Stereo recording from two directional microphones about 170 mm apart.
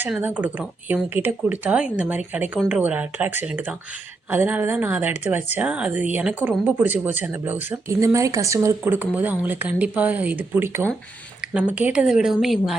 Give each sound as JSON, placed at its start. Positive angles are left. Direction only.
{"t": 0.0, "sound": "a woman's voice", "side_deg": -10}